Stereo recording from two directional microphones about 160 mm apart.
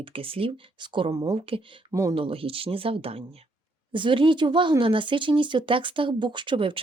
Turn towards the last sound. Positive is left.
turn(degrees=-30)  # may be behind; listen again after turning